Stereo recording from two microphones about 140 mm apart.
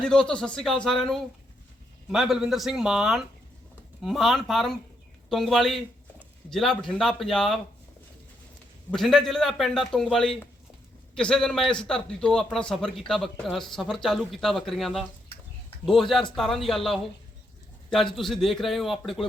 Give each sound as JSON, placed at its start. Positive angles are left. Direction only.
{"t": 0.0, "sound": "a man's voice", "side_deg": 5}
{"t": 8.9, "sound": "a man's voice", "side_deg": 0}